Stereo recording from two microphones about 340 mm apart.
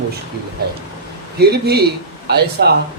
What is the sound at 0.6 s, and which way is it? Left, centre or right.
Speech, right.